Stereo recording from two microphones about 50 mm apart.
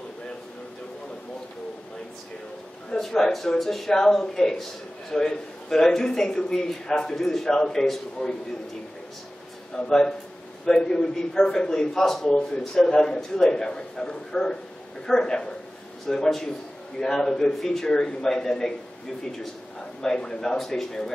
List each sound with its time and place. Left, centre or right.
2.9 s a man's voice: centre
8.2 s a man's voice: centre
9.8 s a man's voice: centre